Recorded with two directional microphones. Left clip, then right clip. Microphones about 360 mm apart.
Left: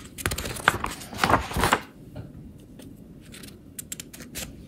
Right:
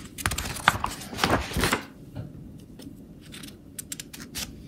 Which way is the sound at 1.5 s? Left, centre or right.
Left.